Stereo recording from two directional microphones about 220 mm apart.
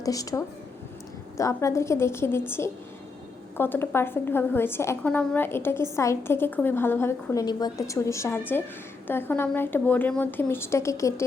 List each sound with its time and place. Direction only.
0.0 s a woman's voice: 15° left (ahead or behind)
3.6 s a woman's voice: 10° left (ahead or behind)